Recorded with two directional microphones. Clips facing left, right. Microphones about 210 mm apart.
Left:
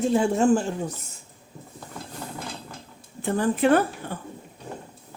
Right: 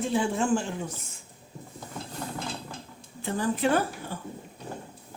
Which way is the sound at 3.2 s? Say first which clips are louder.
Left 5 dB; 60° left (ahead or behind).